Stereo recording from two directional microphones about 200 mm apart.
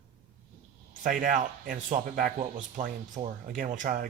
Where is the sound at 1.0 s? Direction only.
40° right (ahead or behind).